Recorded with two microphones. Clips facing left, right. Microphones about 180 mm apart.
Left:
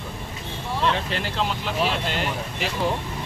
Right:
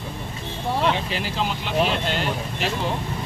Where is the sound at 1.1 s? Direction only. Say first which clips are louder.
Even; 5° right (ahead or behind).